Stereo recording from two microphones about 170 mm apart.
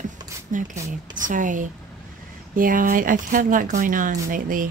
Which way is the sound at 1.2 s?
50° right (ahead or behind).